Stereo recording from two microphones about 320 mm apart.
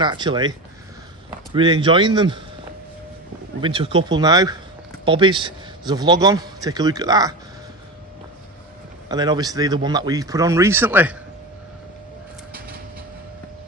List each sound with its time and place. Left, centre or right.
0.0 s a man's voice: centre
3.6 s a man's voice: centre
9.1 s a man's voice: centre